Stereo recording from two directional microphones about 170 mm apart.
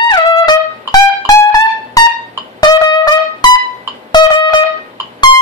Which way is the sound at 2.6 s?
25° left (ahead or behind).